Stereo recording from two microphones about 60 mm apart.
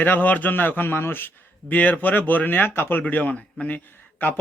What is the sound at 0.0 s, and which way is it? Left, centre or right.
Speech, left.